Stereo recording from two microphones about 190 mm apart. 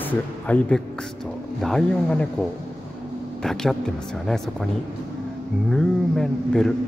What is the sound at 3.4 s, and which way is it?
Speech, centre (ahead or behind).